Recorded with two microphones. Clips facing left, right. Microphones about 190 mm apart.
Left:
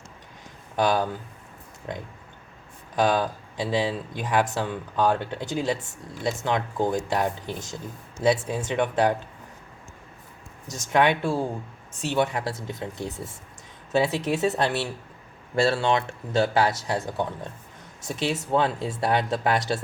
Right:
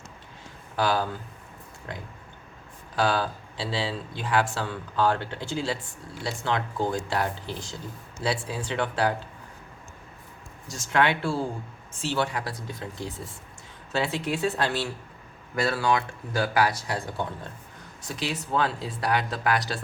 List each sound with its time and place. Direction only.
0.8 s speech: 20° left (ahead or behind)
2.9 s speech: 20° left (ahead or behind)
10.7 s speech: 20° left (ahead or behind)
18.1 s speech: 25° left (ahead or behind)